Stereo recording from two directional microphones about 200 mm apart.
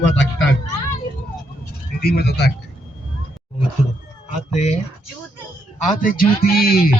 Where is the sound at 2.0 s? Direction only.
50° left (ahead or behind).